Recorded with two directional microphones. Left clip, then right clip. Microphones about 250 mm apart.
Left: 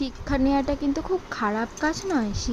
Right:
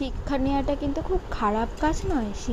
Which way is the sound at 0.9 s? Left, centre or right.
Centre.